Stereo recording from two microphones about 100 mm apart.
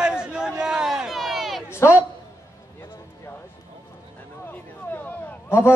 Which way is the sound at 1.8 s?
30° left (ahead or behind).